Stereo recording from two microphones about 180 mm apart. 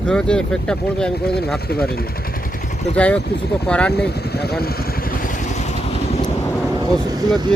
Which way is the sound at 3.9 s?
65° left (ahead or behind).